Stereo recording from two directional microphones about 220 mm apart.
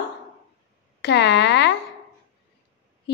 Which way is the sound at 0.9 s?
50° left (ahead or behind).